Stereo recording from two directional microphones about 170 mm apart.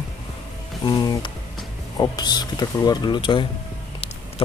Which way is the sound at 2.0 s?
25° left (ahead or behind).